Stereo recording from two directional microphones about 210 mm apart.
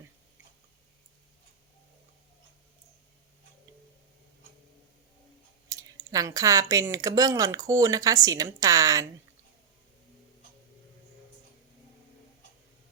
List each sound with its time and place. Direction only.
5.6 s speech: 15° right (ahead or behind)